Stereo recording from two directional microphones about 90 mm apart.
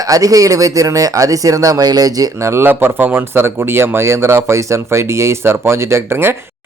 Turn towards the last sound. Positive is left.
turn(degrees=-25)  # may be behind; listen again after turning